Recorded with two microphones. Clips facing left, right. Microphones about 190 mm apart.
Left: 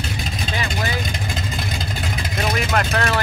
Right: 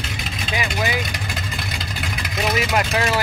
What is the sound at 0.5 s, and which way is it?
Speech, 15° right (ahead or behind).